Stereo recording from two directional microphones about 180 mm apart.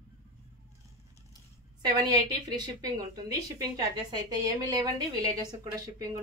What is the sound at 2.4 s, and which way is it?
A woman's voice, 20° right (ahead or behind).